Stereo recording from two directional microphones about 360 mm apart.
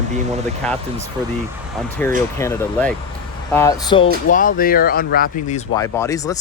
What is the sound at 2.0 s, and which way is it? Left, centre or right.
Speech, centre.